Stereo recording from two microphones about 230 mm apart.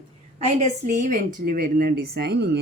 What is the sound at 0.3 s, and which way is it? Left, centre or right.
A woman's voice, right.